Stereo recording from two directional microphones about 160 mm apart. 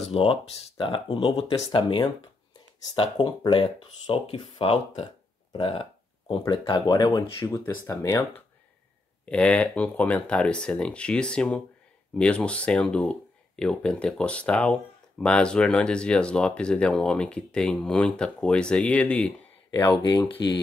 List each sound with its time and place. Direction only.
0.1 s speech: 35° left (ahead or behind)
9.2 s speech: 5° left (ahead or behind)
19.7 s speech: 30° left (ahead or behind)